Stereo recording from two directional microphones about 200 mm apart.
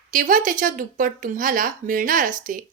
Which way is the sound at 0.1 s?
45° right (ahead or behind).